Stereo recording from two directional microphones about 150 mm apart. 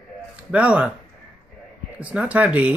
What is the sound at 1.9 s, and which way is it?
Speech, 10° right (ahead or behind).